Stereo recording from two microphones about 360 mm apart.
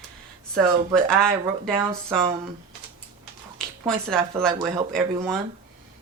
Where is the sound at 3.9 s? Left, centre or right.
Centre.